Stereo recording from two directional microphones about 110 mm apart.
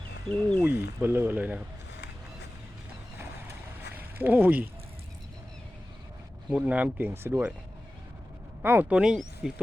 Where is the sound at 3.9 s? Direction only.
15° right (ahead or behind).